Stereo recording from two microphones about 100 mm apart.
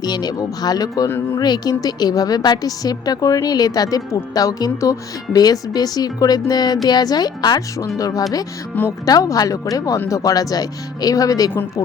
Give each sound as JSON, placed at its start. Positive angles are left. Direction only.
{"t": 0.0, "sound": "a woman's voice", "side_deg": 45}